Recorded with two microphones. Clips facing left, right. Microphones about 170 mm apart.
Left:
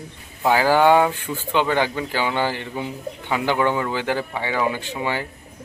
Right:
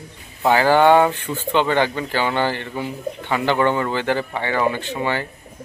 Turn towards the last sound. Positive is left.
turn(degrees=10)  # may be behind; listen again after turning